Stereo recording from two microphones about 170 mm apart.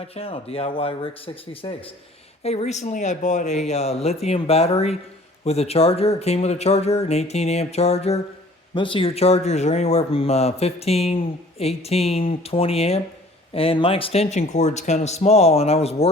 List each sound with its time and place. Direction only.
0.2 s a man's voice: 35° left (ahead or behind)
2.4 s speech: 40° left (ahead or behind)